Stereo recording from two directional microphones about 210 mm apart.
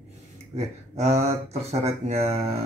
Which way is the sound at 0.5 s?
30° right (ahead or behind).